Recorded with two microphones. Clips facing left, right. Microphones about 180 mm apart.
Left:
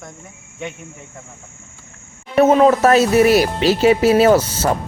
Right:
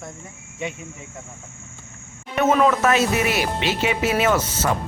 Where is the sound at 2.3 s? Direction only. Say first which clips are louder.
Left 6 dB; 35° left (ahead or behind).